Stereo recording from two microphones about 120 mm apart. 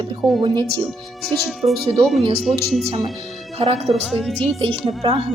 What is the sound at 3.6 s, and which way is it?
Speech, 60° right (ahead or behind).